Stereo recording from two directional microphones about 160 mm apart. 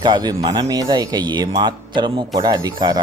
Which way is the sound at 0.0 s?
25° right (ahead or behind).